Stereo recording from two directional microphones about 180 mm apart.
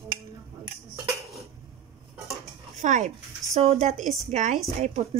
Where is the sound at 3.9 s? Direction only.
Centre (ahead or behind).